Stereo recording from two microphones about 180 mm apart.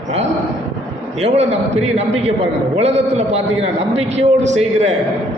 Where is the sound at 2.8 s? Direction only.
35° right (ahead or behind).